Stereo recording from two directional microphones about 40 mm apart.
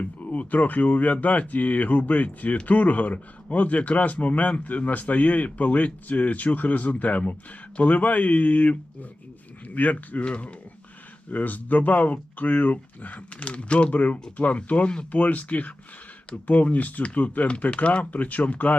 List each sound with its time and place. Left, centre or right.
0.0 s speech: left
10.2 s speech: left
11.3 s speech: left